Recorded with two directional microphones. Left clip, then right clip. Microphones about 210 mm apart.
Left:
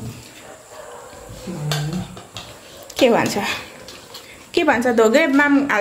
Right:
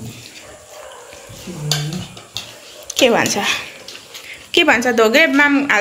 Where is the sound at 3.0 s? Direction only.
Centre (ahead or behind).